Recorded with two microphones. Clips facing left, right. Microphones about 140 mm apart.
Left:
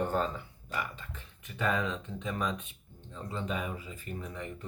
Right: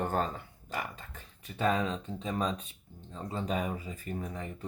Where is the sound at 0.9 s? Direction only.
35° right (ahead or behind).